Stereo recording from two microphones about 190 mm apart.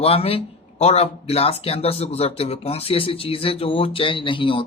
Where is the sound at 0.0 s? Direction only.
30° left (ahead or behind).